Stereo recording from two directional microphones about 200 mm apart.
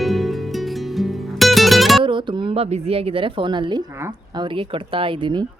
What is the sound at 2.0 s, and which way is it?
A woman's voice, 25° right (ahead or behind).